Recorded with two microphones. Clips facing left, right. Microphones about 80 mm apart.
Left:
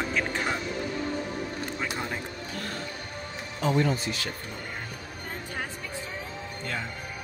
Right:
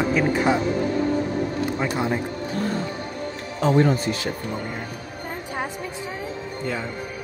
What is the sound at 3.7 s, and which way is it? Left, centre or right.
Speech, right.